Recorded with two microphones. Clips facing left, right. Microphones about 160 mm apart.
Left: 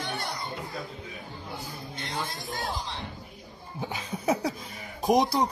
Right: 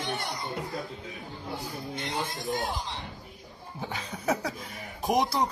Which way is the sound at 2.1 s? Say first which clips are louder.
Right 3 dB; 20° right (ahead or behind).